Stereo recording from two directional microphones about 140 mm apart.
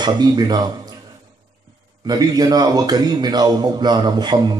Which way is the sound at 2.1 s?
30° right (ahead or behind).